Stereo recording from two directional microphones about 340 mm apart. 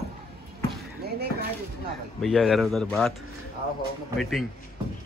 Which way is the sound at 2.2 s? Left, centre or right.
Centre.